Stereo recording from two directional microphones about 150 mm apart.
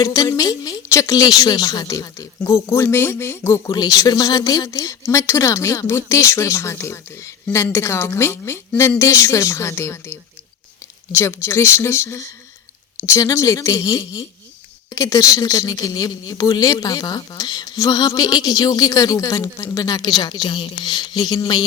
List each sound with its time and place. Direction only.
0.0 s speech: 25° left (ahead or behind)